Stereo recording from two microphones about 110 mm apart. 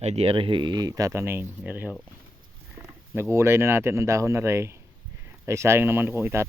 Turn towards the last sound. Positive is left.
turn(degrees=-25)  # may be behind; listen again after turning